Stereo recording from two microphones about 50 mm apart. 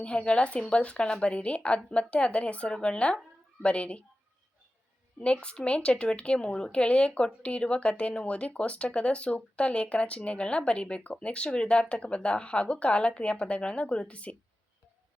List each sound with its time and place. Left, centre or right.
0.0 s speech: left
5.2 s speech: left